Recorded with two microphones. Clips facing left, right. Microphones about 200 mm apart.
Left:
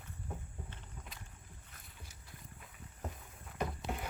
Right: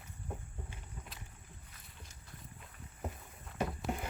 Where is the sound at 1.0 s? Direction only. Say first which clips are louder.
Right 2 dB; 10° right (ahead or behind).